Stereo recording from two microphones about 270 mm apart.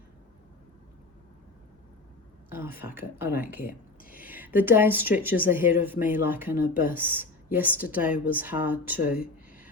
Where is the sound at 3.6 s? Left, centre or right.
Left.